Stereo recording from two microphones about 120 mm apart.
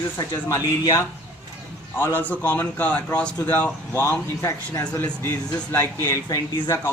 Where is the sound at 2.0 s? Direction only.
20° left (ahead or behind).